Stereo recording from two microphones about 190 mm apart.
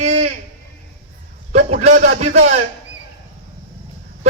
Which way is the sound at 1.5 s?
35° right (ahead or behind).